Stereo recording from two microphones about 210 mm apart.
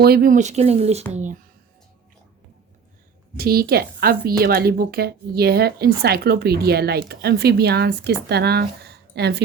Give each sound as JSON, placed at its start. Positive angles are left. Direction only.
{"t": 0.0, "sound": "speech", "side_deg": -45}
{"t": 3.3, "sound": "speech", "side_deg": -45}